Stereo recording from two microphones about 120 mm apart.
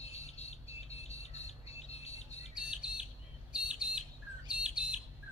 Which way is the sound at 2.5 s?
5° right (ahead or behind).